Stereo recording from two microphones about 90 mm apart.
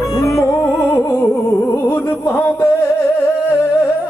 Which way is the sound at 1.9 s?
20° left (ahead or behind).